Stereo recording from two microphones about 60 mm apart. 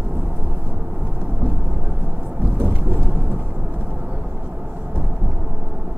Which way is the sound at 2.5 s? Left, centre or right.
Right.